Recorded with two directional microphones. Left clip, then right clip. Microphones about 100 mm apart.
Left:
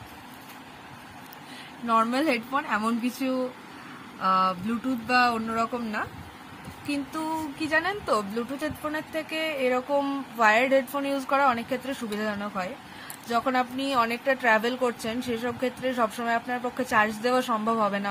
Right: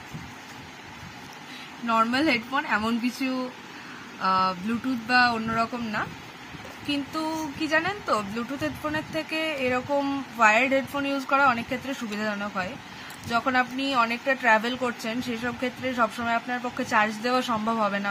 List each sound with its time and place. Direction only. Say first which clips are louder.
1.9 s speech: right 1 dB; 40° left (ahead or behind)
7.8 s speech: even; 50° left (ahead or behind); by 9.8 s 35° left (ahead or behind)
9.9 s a woman's voice: right 1 dB; 45° left (ahead or behind)
12.3 s speech: right 4 dB; 30° left (ahead or behind)
13.8 s a woman's voice: right 1 dB; 50° left (ahead or behind)